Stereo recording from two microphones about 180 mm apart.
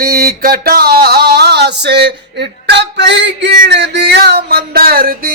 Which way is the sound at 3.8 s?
70° right (ahead or behind).